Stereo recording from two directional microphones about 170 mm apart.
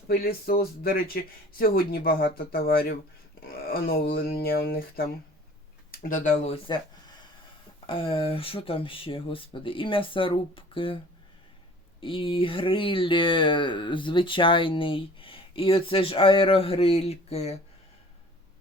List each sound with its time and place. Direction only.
0.1 s speech: 60° left (ahead or behind); by 6.6 s 40° left (ahead or behind)
7.9 s speech: 30° left (ahead or behind)